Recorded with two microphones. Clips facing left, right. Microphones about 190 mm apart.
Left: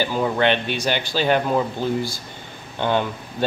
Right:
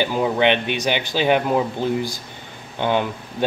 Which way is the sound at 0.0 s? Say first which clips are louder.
Right 1 dB; 15° right (ahead or behind).